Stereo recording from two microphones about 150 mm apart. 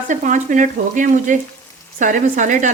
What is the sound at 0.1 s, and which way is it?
Speech, 55° right (ahead or behind).